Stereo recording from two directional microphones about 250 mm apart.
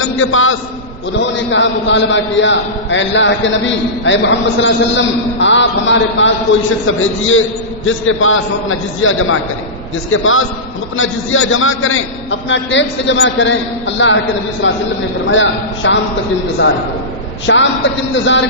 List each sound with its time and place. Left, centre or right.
0.0 s a man's voice: left
17.5 s a man's voice: left